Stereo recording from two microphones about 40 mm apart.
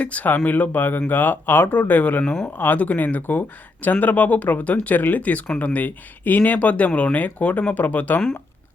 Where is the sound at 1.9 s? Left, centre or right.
Left.